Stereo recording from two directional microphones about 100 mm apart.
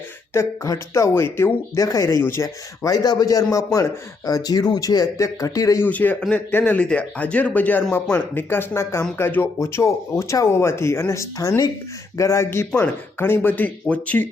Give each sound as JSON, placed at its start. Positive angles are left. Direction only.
{"t": 0.3, "sound": "speech", "side_deg": 30}
{"t": 2.8, "sound": "speech", "side_deg": 40}
{"t": 5.8, "sound": "speech", "side_deg": 15}